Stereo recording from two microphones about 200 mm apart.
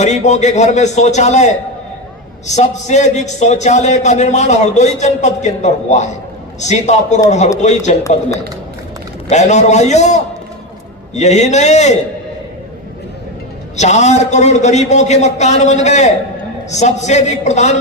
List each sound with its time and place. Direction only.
0.0 s a man's voice: 35° left (ahead or behind)
9.3 s a man's voice: 35° left (ahead or behind)
13.7 s a man's voice: 35° left (ahead or behind)